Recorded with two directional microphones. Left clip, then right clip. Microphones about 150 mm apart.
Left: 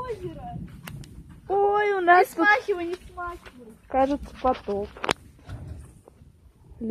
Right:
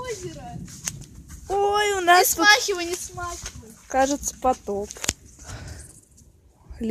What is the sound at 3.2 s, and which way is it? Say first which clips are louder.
Speech: even; 70° right (ahead or behind).